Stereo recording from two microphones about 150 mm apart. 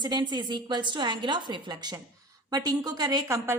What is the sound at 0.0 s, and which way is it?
A woman's voice, 30° right (ahead or behind).